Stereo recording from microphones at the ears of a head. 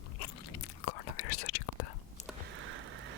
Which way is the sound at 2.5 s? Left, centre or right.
Right.